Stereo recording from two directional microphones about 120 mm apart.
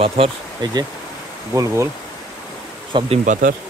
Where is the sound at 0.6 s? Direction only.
40° right (ahead or behind).